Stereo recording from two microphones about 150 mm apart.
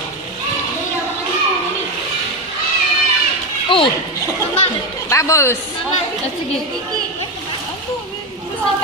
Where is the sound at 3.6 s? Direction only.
35° left (ahead or behind).